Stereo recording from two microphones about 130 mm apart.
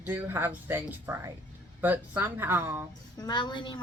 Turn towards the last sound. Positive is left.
turn(degrees=35)  # may be behind; listen again after turning